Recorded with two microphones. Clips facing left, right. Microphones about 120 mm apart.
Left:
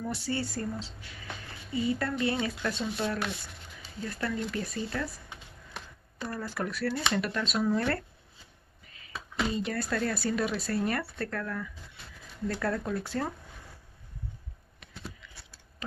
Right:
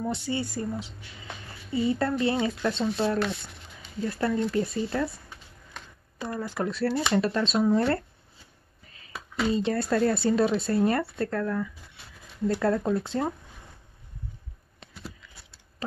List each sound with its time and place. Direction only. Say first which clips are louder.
0.0 s speech: right 3 dB; 20° right (ahead or behind)
1.7 s speech: right 4 dB; 30° right (ahead or behind)
6.1 s speech: right 4 dB; 15° right (ahead or behind)
9.5 s speech: right 9 dB; 30° right (ahead or behind)
15.2 s a sound: even; 40° right (ahead or behind)